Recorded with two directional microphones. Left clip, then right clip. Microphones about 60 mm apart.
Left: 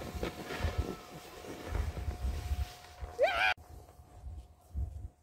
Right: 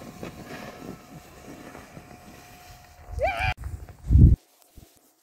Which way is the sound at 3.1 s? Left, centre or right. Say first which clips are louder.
Right 2 dB; left.